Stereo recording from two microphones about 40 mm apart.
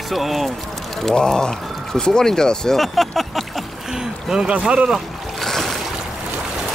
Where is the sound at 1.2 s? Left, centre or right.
Centre.